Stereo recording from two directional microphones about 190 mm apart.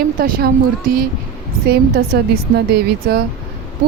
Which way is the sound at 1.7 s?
55° right (ahead or behind).